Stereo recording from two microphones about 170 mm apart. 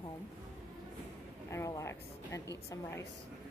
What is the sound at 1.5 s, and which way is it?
Music, 15° left (ahead or behind).